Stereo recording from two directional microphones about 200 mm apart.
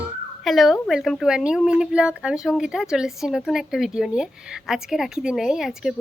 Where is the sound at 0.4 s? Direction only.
Centre (ahead or behind).